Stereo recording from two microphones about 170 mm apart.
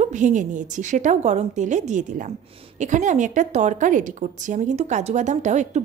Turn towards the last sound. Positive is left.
turn(degrees=-45)  # may be behind; listen again after turning